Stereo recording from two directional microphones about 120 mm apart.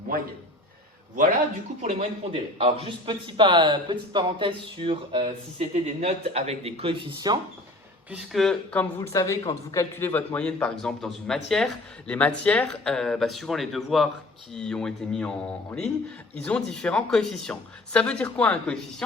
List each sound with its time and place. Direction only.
1.8 s speech: 65° right (ahead or behind)
2.6 s a man's voice: 50° right (ahead or behind)
7.3 s speech: 35° right (ahead or behind)
8.1 s speech: 5° right (ahead or behind)
9.0 s a man's voice: 25° left (ahead or behind)
10.1 s a man's voice: 10° left (ahead or behind)